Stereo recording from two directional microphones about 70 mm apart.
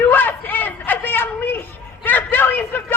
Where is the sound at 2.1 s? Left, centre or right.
Left.